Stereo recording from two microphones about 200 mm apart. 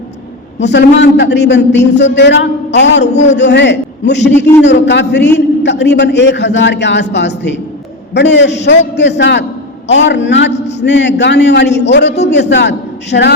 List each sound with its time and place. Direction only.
0.6 s a man's voice: 60° left (ahead or behind)
3.1 s a man's voice: 35° left (ahead or behind)
3.3 s a man's voice: 60° left (ahead or behind)
10.5 s a sound: 35° left (ahead or behind)
10.8 s a man's voice: 60° left (ahead or behind)